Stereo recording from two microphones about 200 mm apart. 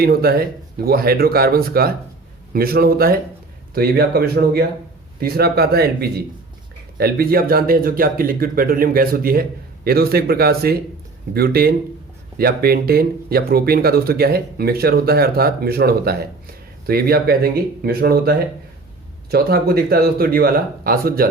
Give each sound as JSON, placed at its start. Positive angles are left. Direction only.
{"t": 0.0, "sound": "speech", "side_deg": -50}